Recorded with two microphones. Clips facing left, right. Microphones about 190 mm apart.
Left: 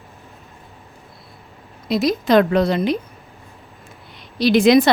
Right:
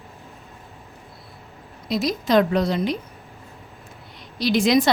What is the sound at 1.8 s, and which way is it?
A woman's voice, 60° left (ahead or behind).